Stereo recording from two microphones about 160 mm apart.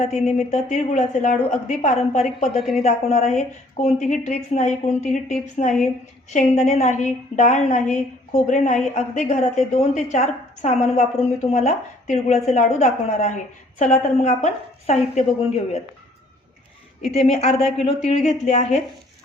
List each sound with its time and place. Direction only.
0.0 s speech: 45° left (ahead or behind)
2.6 s speech: centre (ahead or behind)
2.8 s speech: 45° left (ahead or behind)
17.1 s a woman's voice: 40° left (ahead or behind)